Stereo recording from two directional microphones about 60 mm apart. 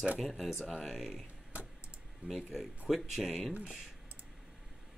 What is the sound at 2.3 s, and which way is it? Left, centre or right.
Speech, centre.